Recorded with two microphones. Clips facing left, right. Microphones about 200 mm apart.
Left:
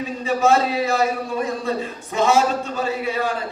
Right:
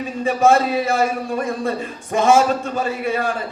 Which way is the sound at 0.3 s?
50° right (ahead or behind).